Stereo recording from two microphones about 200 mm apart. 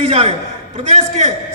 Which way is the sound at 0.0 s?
30° right (ahead or behind).